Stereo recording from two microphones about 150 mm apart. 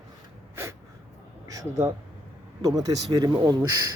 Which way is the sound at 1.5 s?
20° right (ahead or behind).